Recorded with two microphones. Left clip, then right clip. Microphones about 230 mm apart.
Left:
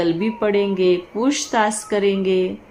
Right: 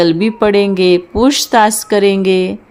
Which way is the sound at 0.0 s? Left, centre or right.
Right.